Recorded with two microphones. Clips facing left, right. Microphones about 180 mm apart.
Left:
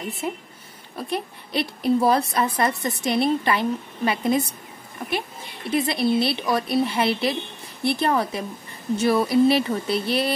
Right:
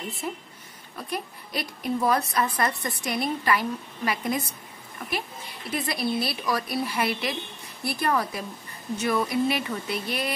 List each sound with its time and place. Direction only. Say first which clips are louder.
0.2 s a woman's voice: left 4 dB; 20° left (ahead or behind)
5.7 s a woman's voice: left 7 dB; 25° left (ahead or behind)